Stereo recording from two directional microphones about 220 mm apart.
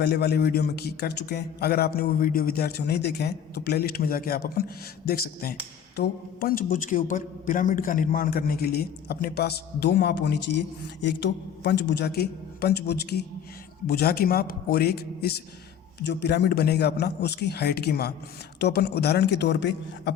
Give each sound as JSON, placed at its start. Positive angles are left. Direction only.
{"t": 0.0, "sound": "a man's voice", "side_deg": 50}